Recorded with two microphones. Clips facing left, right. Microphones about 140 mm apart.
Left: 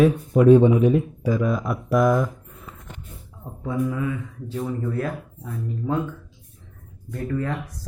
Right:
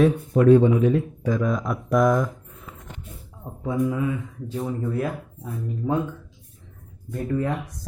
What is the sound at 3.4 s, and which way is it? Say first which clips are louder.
Speech: right 1 dB; 10° right (ahead or behind).